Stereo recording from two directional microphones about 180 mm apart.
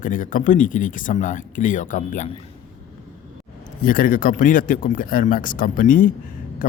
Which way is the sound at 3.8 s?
50° left (ahead or behind).